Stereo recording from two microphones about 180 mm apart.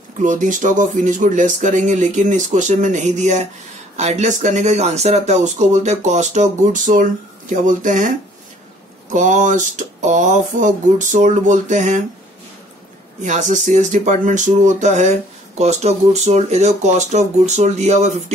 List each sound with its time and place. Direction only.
0.2 s speech: 45° right (ahead or behind)
9.1 s speech: 45° right (ahead or behind)
13.2 s speech: 45° right (ahead or behind)